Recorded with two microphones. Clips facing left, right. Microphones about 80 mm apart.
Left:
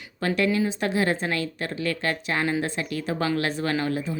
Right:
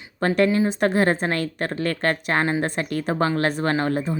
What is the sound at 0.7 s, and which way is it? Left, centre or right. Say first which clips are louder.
A woman's voice: right 5 dB; right.